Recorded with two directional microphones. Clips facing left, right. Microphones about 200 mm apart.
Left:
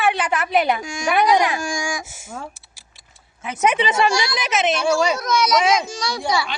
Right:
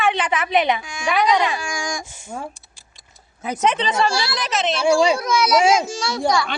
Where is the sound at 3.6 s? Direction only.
10° left (ahead or behind).